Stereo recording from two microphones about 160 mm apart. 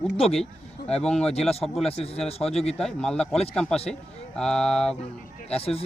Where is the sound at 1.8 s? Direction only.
40° left (ahead or behind).